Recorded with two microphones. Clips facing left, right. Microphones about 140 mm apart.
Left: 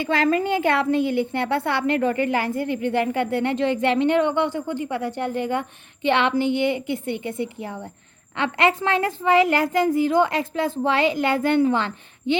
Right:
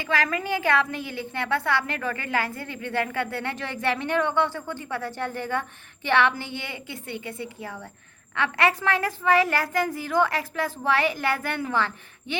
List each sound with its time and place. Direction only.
0.0 s a woman's voice: 30° left (ahead or behind)